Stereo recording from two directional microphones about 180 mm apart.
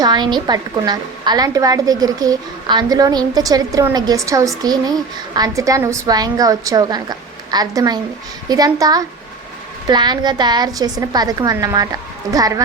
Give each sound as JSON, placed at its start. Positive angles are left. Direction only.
{"t": 0.0, "sound": "a woman's voice", "side_deg": -25}